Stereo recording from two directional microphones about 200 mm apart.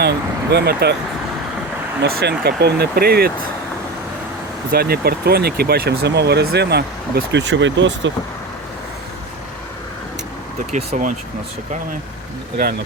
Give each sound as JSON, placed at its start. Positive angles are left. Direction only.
{"t": 0.0, "sound": "speech", "side_deg": -55}
{"t": 2.0, "sound": "speech", "side_deg": -55}
{"t": 4.7, "sound": "speech", "side_deg": -50}
{"t": 10.7, "sound": "speech", "side_deg": -35}